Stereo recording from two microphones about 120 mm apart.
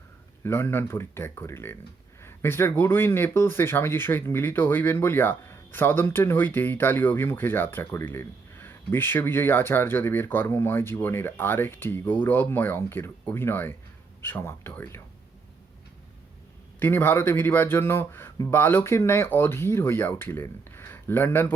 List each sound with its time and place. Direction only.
0.4 s speech: 20° left (ahead or behind)
16.8 s speech: 20° left (ahead or behind)